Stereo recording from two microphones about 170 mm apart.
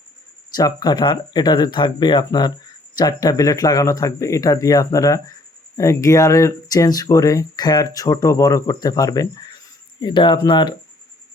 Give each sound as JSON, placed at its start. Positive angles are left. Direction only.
{"t": 0.5, "sound": "speech", "side_deg": 25}